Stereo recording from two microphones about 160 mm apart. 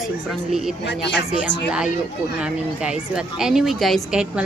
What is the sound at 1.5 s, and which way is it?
Speech, 90° left.